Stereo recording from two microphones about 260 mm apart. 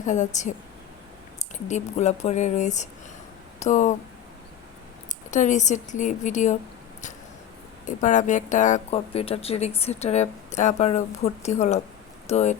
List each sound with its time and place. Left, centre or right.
0.0 s a woman's voice: left
1.6 s a woman's voice: left
5.3 s a woman's voice: left
7.9 s a woman's voice: left